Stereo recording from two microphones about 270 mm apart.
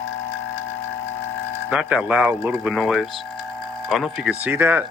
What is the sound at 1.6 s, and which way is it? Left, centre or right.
Speech, centre.